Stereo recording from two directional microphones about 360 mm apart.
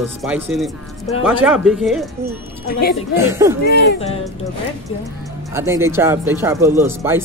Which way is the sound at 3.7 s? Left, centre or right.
Centre.